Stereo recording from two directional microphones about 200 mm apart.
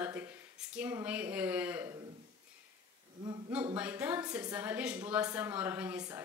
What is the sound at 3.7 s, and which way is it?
Speech, 5° right (ahead or behind).